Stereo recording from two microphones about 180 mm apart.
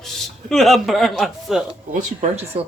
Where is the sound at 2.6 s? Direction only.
35° right (ahead or behind).